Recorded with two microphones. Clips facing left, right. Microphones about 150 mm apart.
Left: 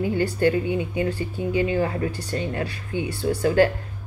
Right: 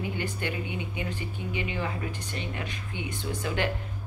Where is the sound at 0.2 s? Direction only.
40° left (ahead or behind).